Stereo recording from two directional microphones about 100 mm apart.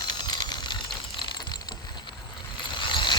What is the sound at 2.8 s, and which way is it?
Vehicle, 55° left (ahead or behind).